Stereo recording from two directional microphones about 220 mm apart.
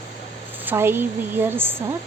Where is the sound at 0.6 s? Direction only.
10° right (ahead or behind).